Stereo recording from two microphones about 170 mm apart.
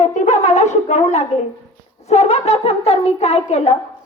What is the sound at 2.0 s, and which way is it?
Wind instrument, 40° left (ahead or behind).